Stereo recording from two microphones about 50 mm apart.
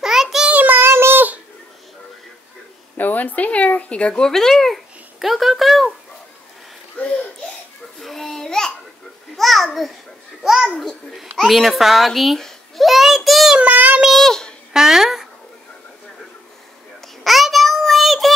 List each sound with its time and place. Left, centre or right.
0.0 s child singing: centre
0.5 s child singing: right
0.7 s child singing: right
3.0 s speech: left; by 5.9 s centre
7.0 s a sound: left
8.0 s a sound: centre
9.4 s babbling: centre
10.8 s a child's voice: centre
13.6 s child singing: right
14.1 s a sound: centre
14.7 s a sound: centre
17.2 s child singing: centre